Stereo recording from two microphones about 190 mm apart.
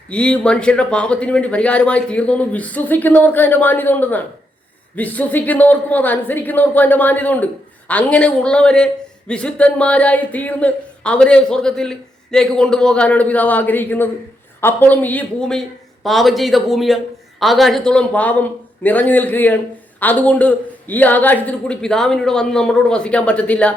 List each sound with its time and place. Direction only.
0.1 s a woman's voice: 5° left (ahead or behind)